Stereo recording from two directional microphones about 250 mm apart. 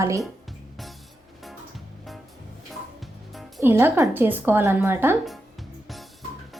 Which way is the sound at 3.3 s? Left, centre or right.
Centre.